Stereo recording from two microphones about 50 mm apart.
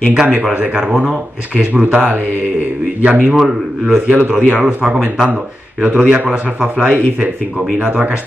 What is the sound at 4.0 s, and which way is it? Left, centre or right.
Speech, right.